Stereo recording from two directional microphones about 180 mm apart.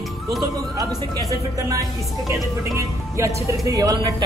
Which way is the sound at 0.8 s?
20° right (ahead or behind).